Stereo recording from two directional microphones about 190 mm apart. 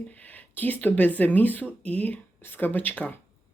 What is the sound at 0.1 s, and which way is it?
Speech, 10° left (ahead or behind).